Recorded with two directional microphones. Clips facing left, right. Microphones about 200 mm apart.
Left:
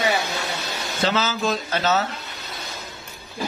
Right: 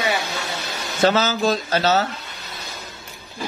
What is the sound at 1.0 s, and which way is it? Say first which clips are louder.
A man's voice: right 5 dB; 45° right (ahead or behind).